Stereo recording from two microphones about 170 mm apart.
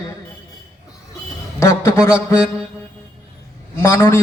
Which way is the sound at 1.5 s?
15° left (ahead or behind).